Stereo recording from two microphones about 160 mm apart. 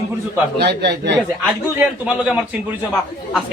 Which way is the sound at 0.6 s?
90° right.